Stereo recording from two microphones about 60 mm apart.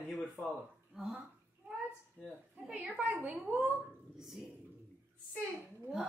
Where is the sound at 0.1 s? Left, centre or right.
Left.